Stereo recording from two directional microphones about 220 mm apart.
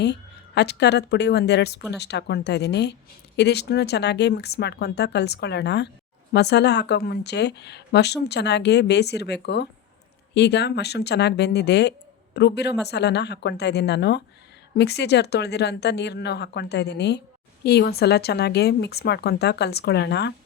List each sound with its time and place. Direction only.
0.0 s a woman's voice: 50° left (ahead or behind)